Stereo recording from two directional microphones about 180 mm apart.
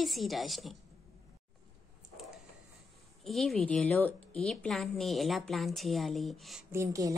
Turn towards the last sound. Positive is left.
turn(degrees=-20)  # may be behind; listen again after turning